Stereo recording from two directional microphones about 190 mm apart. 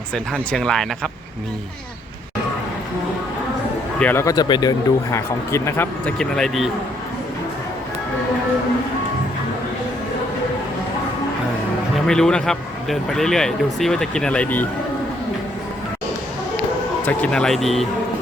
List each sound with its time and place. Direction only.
0.3 s speech: 5° left (ahead or behind)
4.0 s a man's voice: 10° left (ahead or behind)
11.9 s speech: 5° left (ahead or behind)
17.1 s speech: 5° left (ahead or behind)